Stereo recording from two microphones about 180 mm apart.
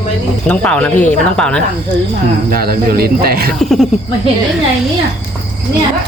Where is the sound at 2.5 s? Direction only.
55° right (ahead or behind).